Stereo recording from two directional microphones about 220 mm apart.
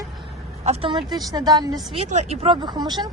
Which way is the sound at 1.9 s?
30° right (ahead or behind).